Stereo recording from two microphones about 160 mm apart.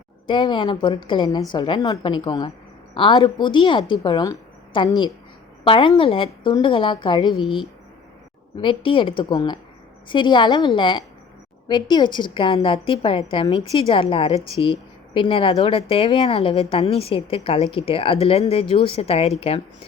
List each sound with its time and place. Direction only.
0.3 s a woman's voice: 30° left (ahead or behind)
8.6 s a woman's voice: 35° left (ahead or behind)